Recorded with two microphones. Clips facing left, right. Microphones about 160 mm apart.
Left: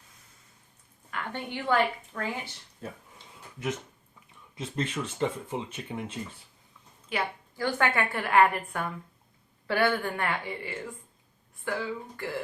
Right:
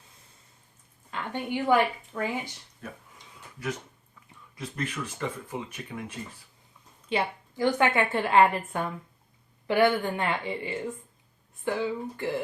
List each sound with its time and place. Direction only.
1.1 s a woman's voice: 15° right (ahead or behind)
4.5 s speech: 25° left (ahead or behind)
7.1 s a woman's voice: 20° right (ahead or behind)